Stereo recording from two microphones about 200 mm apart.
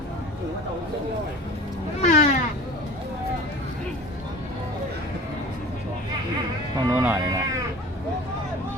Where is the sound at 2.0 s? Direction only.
35° left (ahead or behind).